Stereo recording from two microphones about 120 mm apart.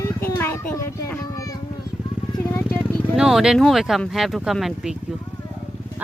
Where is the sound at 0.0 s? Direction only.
25° left (ahead or behind).